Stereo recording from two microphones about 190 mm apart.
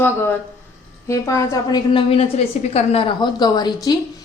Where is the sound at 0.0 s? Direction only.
10° left (ahead or behind).